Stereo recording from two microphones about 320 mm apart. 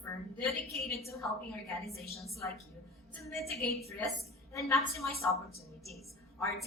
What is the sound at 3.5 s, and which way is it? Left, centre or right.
Speech, left.